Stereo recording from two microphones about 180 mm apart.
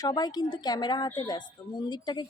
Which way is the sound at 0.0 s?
20° left (ahead or behind).